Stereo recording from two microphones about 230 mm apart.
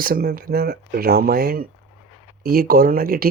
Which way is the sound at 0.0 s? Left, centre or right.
Right.